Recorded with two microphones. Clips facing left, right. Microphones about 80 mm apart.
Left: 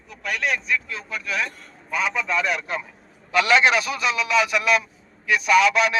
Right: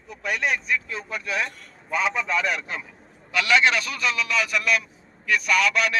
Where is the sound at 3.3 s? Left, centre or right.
Left.